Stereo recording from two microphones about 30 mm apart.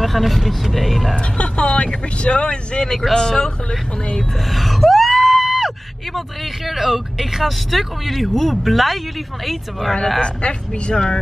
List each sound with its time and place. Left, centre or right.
0.0 s speech: centre
1.4 s vehicle: left
2.2 s a woman's voice: left
4.5 s gasp: centre
6.1 s speech: centre
10.2 s a woman's voice: left